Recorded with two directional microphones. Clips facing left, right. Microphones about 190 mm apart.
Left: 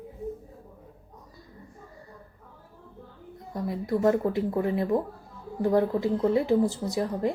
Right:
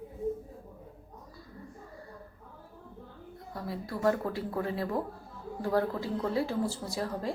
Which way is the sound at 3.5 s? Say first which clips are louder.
Left 9 dB; 20° left (ahead or behind).